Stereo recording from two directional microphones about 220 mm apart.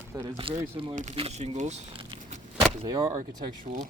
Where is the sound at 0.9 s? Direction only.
30° right (ahead or behind).